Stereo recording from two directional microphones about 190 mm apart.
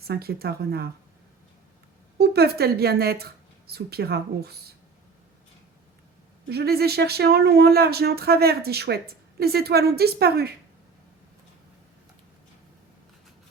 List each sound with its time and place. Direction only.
0.0 s speech: 55° right (ahead or behind)
2.1 s speech: 55° right (ahead or behind)
6.5 s speech: 55° right (ahead or behind)